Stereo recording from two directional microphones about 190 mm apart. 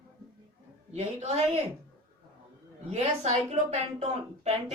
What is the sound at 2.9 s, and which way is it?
A woman's voice, 35° right (ahead or behind).